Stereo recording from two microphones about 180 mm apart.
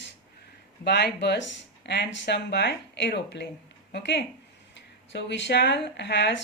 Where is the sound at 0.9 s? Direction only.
65° left (ahead or behind).